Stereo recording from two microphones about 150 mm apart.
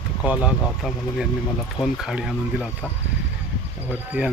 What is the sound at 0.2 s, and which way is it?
Speech, 5° right (ahead or behind).